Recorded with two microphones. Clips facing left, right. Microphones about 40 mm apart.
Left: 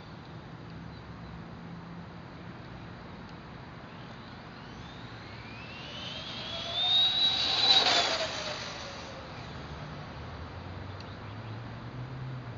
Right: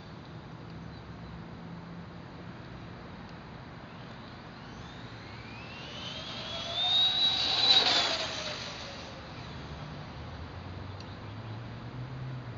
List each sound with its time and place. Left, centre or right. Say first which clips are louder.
6.5 s vehicle: left 1 dB; centre
7.9 s vehicle: left 2 dB; centre
8.5 s vehicle: left 1 dB; centre